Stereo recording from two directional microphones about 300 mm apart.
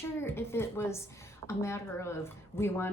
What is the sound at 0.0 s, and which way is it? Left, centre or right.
A woman's voice, centre.